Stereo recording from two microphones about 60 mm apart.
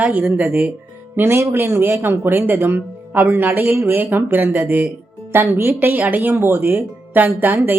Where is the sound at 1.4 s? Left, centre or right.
Right.